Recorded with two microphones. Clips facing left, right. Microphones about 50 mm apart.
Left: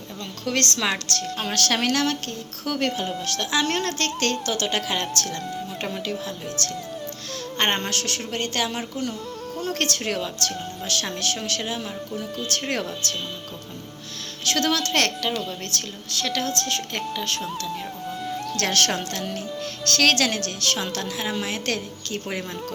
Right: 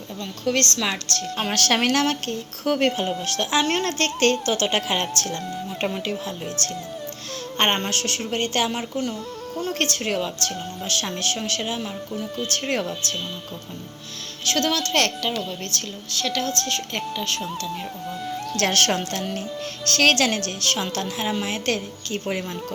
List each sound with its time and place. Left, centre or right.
0.4 s speech: centre
1.4 s speech: right
5.4 s speech: centre
5.8 s speech: centre
14.4 s speech: centre
18.1 s music: centre
18.5 s speech: centre